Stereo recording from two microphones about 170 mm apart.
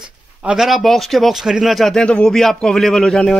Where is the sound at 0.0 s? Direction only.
5° right (ahead or behind).